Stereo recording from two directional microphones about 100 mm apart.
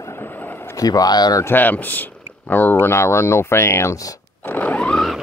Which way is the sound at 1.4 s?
20° left (ahead or behind).